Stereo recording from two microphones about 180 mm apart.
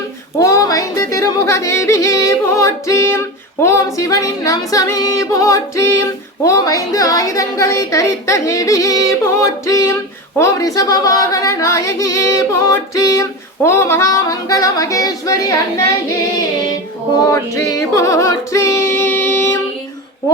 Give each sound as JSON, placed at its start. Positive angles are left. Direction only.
{"t": 0.3, "sound": "yodeling", "side_deg": 15}
{"t": 3.6, "sound": "music", "side_deg": 15}
{"t": 6.4, "sound": "a woman's voice", "side_deg": 20}
{"t": 13.7, "sound": "music", "side_deg": 15}
{"t": 17.5, "sound": "female singing", "side_deg": 15}